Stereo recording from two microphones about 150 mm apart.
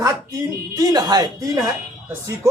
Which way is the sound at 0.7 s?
25° right (ahead or behind).